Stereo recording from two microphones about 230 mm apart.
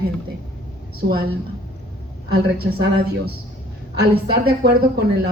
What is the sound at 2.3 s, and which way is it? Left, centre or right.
A man's voice, right.